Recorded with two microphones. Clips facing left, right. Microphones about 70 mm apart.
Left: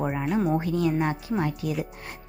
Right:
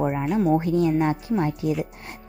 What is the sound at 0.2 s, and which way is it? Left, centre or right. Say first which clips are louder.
Speech: right 3 dB; centre.